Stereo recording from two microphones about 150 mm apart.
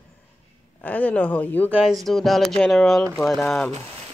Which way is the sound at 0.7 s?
10° left (ahead or behind).